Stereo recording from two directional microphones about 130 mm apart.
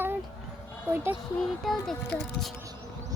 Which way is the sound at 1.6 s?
5° left (ahead or behind).